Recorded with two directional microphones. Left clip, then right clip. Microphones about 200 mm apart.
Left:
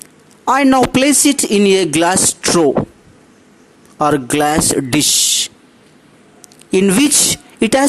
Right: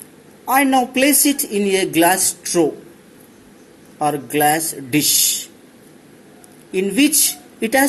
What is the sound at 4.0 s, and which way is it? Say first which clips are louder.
Speech: left 4 dB; 45° left (ahead or behind).